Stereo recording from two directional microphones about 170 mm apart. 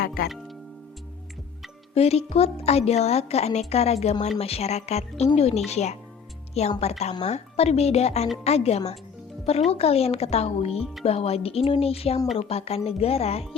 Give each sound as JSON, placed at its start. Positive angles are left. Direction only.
{"t": 2.0, "sound": "a woman's voice", "side_deg": 35}